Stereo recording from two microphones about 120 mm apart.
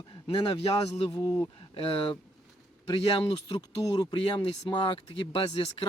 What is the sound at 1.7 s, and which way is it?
Speech, 50° left (ahead or behind).